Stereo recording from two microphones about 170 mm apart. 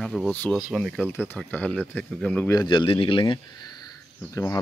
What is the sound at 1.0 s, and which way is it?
Speech, 10° left (ahead or behind).